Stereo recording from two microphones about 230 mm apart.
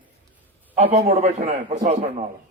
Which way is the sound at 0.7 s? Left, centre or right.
Right.